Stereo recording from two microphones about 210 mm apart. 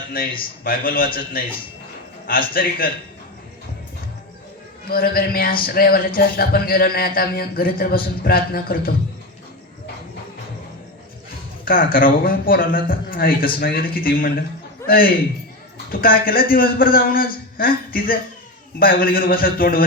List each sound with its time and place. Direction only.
0.1 s speech: 45° left (ahead or behind)
4.9 s speech: 45° left (ahead or behind)
11.6 s a man's voice: 45° left (ahead or behind)